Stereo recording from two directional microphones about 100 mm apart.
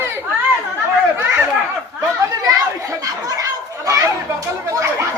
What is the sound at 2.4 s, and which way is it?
Chatter, 35° right (ahead or behind).